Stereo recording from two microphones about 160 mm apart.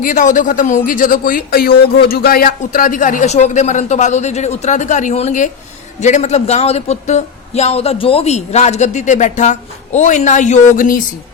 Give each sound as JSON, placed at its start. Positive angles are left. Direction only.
{"t": 0.0, "sound": "speech", "side_deg": 55}